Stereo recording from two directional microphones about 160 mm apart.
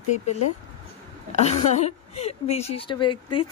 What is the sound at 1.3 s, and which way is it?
A woman's voice, 45° left (ahead or behind).